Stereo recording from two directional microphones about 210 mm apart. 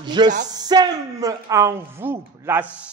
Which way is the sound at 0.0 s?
20° right (ahead or behind).